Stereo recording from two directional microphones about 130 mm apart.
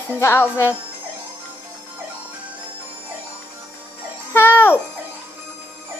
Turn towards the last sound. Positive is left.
turn(degrees=15)  # may be behind; listen again after turning